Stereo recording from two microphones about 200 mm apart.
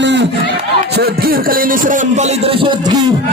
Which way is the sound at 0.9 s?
50° right (ahead or behind).